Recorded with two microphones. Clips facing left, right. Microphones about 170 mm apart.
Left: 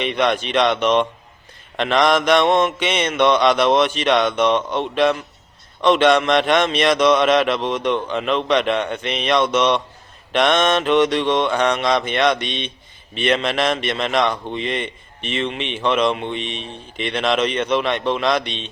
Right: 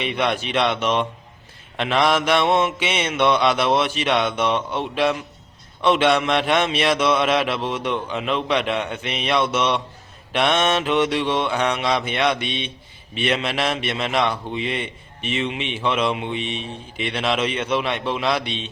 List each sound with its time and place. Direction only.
0.0 s a man's voice: 5° right (ahead or behind)